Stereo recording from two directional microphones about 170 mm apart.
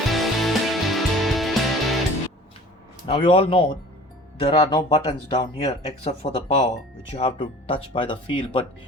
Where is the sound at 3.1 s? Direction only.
35° left (ahead or behind).